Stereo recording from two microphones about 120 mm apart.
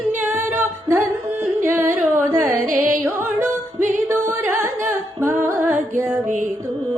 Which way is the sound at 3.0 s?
20° right (ahead or behind).